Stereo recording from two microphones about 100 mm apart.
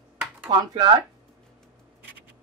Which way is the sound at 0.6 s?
50° right (ahead or behind).